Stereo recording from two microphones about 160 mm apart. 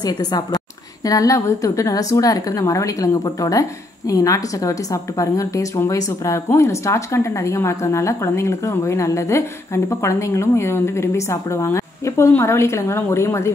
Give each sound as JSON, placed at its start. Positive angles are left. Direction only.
{"t": 0.0, "sound": "a woman's voice", "side_deg": 25}